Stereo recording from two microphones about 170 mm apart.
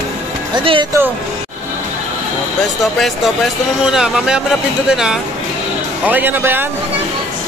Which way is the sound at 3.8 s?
5° right (ahead or behind).